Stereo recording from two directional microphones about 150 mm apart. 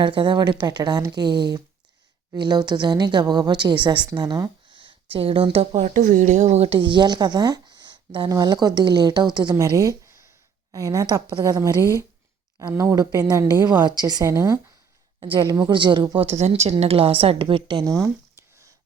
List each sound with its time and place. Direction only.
0.0 s a woman's voice: 35° right (ahead or behind)